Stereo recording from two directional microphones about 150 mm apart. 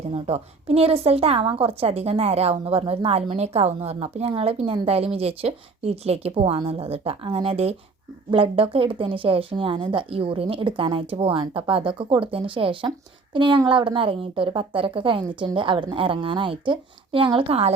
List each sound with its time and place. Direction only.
0.1 s a woman's voice: 40° right (ahead or behind)